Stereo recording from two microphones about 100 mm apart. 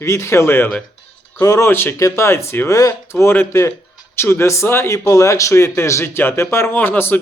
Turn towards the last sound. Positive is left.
turn(degrees=20)  # may be behind; listen again after turning